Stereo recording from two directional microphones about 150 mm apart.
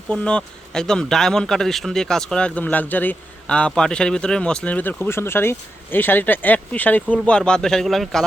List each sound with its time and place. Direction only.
0.1 s speech: 5° left (ahead or behind)